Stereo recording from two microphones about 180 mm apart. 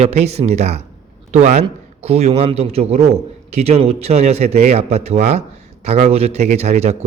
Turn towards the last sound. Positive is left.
turn(degrees=-35)  # may be behind; listen again after turning